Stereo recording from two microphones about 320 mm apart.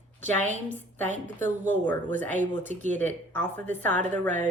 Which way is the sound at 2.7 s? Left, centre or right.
Right.